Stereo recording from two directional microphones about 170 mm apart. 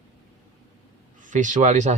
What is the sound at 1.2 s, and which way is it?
Speech, 50° right (ahead or behind).